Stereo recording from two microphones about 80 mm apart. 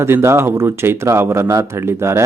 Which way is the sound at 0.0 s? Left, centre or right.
Right.